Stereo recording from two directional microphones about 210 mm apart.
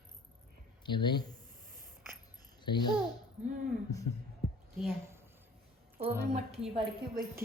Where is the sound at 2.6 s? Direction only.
20° left (ahead or behind).